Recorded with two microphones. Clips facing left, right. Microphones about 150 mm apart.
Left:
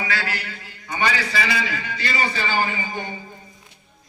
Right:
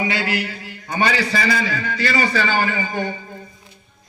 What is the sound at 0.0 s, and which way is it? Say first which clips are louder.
Speech: right 5 dB; 25° right (ahead or behind).